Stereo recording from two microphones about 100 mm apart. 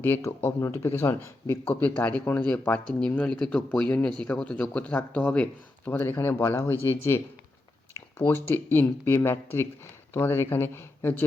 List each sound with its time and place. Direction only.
0.0 s a man's voice: 25° left (ahead or behind)